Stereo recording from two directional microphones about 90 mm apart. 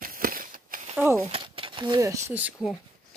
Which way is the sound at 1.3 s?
70° right (ahead or behind).